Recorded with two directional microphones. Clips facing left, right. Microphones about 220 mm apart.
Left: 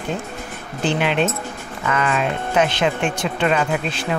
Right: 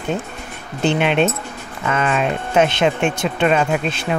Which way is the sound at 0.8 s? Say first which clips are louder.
Right 3 dB; 20° right (ahead or behind).